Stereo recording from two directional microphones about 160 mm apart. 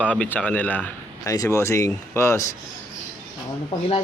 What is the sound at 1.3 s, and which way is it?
Speech, 20° left (ahead or behind).